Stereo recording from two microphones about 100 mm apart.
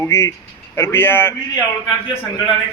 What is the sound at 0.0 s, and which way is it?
Speech, 30° left (ahead or behind).